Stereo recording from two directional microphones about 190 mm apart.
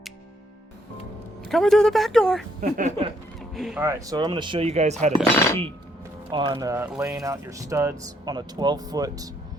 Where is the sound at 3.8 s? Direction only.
15° right (ahead or behind); by 4.9 s 35° right (ahead or behind).